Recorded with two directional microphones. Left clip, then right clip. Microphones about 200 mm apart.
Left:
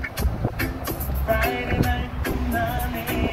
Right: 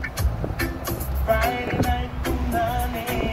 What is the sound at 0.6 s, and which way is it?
Music, 50° right (ahead or behind).